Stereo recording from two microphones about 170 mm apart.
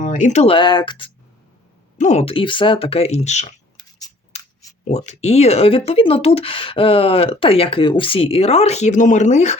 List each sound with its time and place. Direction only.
0.0 s speech: 45° left (ahead or behind)
0.4 s speech: 30° left (ahead or behind)
2.0 s speech: 40° left (ahead or behind)
4.3 s a sound: 40° left (ahead or behind)
4.9 s speech: 40° left (ahead or behind)